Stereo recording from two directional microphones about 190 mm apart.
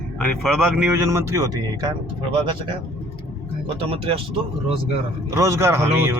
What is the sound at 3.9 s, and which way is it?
Speech, 30° right (ahead or behind).